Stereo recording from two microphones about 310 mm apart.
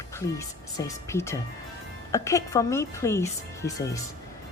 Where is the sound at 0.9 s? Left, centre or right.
Centre.